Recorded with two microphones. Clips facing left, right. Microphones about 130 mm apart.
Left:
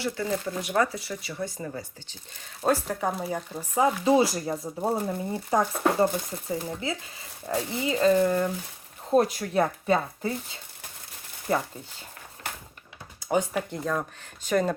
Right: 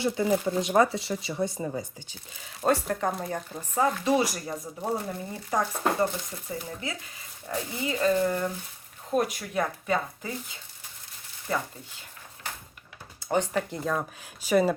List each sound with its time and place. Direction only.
0.0 s speech: 15° right (ahead or behind)
2.4 s speech: centre (ahead or behind)
4.0 s speech: 25° left (ahead or behind)
9.0 s speech: 35° left (ahead or behind)
13.2 s speech: 5° left (ahead or behind)